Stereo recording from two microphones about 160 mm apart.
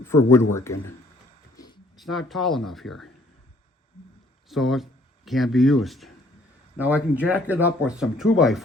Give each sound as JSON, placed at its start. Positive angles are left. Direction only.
{"t": 0.0, "sound": "speech", "side_deg": 15}
{"t": 2.0, "sound": "speech", "side_deg": 0}
{"t": 4.4, "sound": "speech", "side_deg": 0}